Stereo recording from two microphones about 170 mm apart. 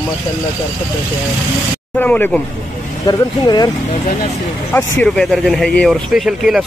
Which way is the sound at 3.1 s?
25° left (ahead or behind).